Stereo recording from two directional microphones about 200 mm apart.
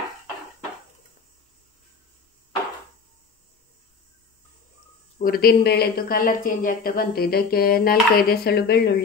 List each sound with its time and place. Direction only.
5.2 s speech: 50° left (ahead or behind)